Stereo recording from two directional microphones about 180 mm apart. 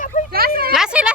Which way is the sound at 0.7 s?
5° right (ahead or behind).